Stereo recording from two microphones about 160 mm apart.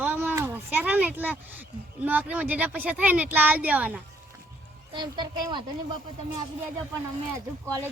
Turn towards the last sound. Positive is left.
turn(degrees=-15)  # may be behind; listen again after turning